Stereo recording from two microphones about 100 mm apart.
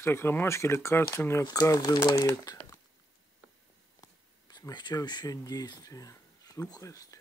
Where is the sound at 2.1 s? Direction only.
30° left (ahead or behind).